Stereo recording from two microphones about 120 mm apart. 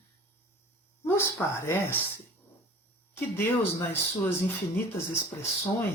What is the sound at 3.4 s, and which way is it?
Speech, 15° left (ahead or behind).